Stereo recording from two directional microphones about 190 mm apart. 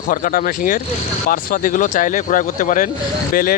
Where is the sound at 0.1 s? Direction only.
45° left (ahead or behind).